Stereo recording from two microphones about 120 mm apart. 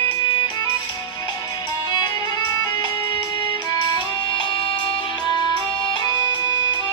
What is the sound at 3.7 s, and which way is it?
Music, 35° left (ahead or behind).